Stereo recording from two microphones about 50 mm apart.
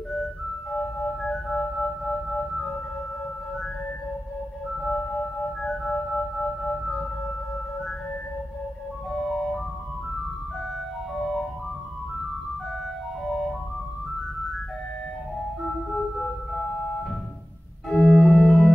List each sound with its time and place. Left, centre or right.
0.1 s music: centre
4.9 s music: left
9.1 s music: centre
13.2 s music: centre
15.9 s music: centre
17.8 s organ: centre